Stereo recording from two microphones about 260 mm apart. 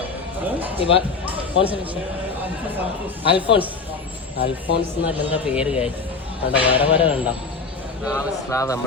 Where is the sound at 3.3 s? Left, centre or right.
Centre.